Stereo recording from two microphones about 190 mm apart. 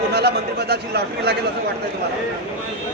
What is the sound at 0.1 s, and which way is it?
A man's voice, 60° right (ahead or behind).